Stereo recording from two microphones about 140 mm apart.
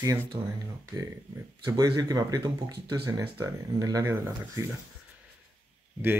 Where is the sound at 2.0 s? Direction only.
25° right (ahead or behind).